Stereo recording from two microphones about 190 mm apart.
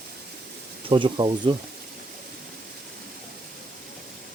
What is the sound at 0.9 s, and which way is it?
Speech, 25° right (ahead or behind).